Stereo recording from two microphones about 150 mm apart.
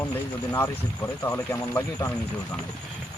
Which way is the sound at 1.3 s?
20° left (ahead or behind).